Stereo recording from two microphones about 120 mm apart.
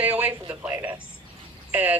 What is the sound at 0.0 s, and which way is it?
Speech, 15° right (ahead or behind).